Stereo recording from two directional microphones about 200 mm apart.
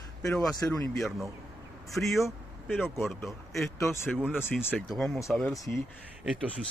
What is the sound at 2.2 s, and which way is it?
A man's voice, 5° left (ahead or behind).